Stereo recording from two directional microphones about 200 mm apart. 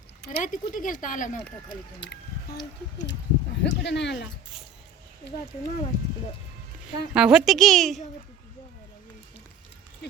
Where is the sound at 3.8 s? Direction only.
60° left (ahead or behind).